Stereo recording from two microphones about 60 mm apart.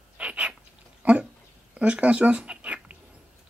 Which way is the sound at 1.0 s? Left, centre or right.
Right.